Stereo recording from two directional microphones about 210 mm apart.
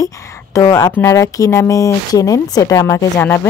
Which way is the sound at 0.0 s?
15° left (ahead or behind).